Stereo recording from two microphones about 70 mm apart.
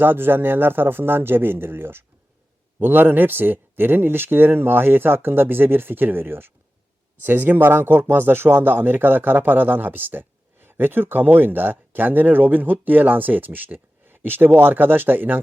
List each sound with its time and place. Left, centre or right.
0.0 s a man's voice: right